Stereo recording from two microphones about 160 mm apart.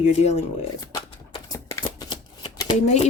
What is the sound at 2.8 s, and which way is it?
Speech, 45° left (ahead or behind).